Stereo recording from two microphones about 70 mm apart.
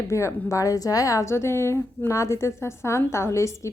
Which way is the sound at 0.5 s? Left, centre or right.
Left.